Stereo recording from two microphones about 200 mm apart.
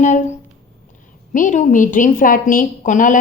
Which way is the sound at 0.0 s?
40° left (ahead or behind).